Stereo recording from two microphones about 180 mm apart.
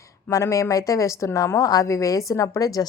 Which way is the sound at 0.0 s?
15° left (ahead or behind).